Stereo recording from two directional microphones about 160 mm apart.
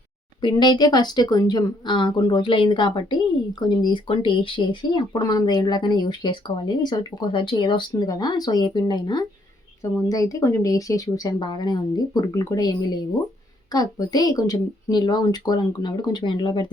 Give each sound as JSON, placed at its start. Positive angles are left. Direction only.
{"t": 0.4, "sound": "speech", "side_deg": 30}